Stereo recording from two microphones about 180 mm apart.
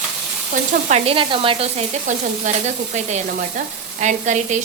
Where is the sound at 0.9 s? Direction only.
35° right (ahead or behind).